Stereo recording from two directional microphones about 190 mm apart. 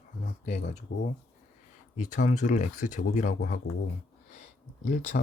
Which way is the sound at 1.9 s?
40° left (ahead or behind).